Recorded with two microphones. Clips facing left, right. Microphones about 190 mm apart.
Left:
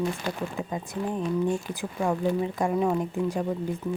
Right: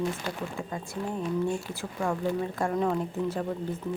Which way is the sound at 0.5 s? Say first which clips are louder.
Left 3 dB; 20° left (ahead or behind).